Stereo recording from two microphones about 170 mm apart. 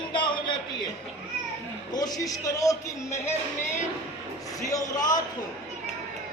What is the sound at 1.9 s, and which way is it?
Speech, 25° left (ahead or behind).